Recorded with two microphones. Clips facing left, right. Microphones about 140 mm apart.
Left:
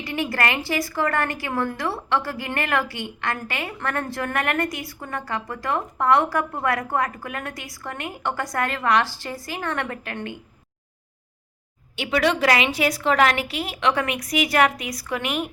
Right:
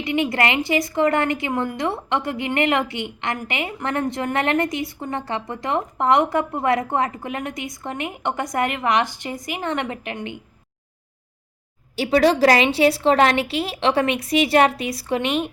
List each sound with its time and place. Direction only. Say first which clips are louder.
0.0 s a woman's voice: right 4 dB; 20° right (ahead or behind)
11.9 s a woman's voice: right 5 dB; 35° right (ahead or behind)